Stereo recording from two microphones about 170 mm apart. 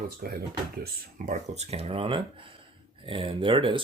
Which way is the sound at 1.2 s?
40° right (ahead or behind).